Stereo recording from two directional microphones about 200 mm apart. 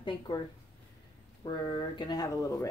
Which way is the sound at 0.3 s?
20° left (ahead or behind).